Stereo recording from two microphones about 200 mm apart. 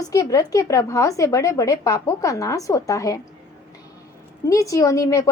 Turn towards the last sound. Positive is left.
turn(degrees=15)  # may be behind; listen again after turning